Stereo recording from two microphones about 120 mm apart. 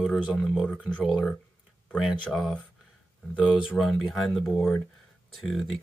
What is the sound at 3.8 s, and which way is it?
Speech, centre (ahead or behind).